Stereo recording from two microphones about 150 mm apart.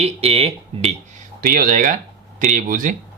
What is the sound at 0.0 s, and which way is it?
Speech, 40° right (ahead or behind).